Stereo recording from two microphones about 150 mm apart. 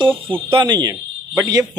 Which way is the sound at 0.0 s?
35° right (ahead or behind).